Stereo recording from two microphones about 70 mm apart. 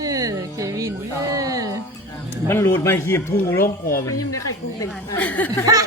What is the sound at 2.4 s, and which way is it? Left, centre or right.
Speech, left.